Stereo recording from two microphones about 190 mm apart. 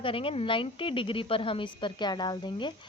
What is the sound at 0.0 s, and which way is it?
A woman's voice, 30° left (ahead or behind).